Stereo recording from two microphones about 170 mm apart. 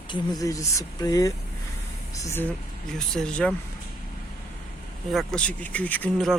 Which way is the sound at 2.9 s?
5° left (ahead or behind).